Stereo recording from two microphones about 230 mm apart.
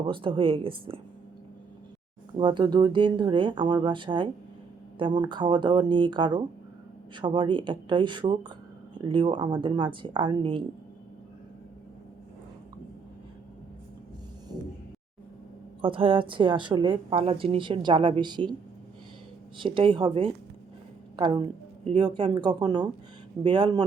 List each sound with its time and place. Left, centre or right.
0.1 s a woman's voice: right
2.4 s a woman's voice: centre
15.8 s a woman's voice: right
19.5 s a woman's voice: right